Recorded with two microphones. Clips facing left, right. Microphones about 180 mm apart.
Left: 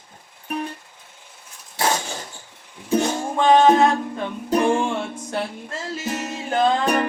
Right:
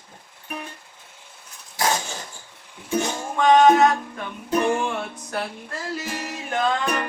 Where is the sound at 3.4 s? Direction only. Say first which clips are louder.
Even; 30° left (ahead or behind).